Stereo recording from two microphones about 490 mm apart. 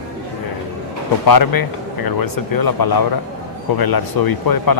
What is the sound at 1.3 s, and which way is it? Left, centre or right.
Speech, left.